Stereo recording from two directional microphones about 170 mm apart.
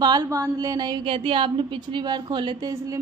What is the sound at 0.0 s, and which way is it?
A woman's voice, 25° right (ahead or behind).